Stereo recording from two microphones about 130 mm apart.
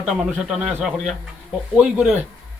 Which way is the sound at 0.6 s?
10° right (ahead or behind).